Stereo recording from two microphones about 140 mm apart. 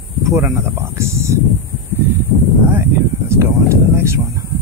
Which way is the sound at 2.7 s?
15° right (ahead or behind).